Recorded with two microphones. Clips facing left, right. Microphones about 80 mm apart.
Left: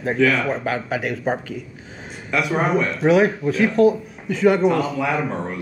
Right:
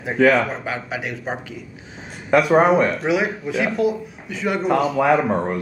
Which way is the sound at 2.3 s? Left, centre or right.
Right.